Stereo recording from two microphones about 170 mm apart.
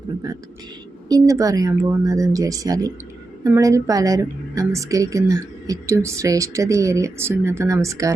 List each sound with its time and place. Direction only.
0.3 s a woman's voice: 20° right (ahead or behind)